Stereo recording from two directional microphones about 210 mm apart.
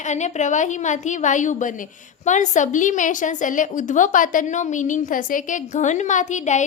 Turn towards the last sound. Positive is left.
turn(degrees=35)  # may be behind; listen again after turning